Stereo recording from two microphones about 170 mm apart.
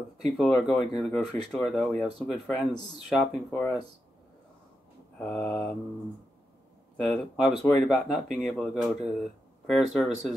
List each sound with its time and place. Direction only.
0.4 s speech: centre (ahead or behind)
5.2 s speech: 5° left (ahead or behind)
7.0 s speech: centre (ahead or behind)